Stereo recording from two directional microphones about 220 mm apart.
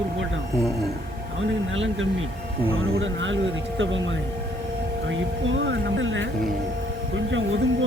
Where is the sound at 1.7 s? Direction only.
60° right (ahead or behind).